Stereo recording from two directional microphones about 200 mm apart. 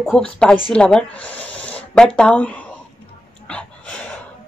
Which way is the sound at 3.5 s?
5° left (ahead or behind).